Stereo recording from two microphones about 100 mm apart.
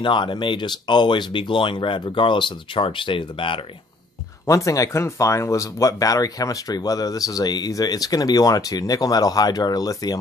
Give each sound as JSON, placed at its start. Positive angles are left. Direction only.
{"t": 0.0, "sound": "speech", "side_deg": 50}
{"t": 4.5, "sound": "speech", "side_deg": 35}